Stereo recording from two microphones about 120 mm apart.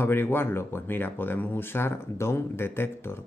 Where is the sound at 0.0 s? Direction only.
20° left (ahead or behind).